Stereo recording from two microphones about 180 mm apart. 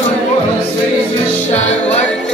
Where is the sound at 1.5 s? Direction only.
40° left (ahead or behind).